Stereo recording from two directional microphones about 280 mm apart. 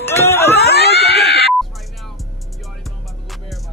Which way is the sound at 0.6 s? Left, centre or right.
Left.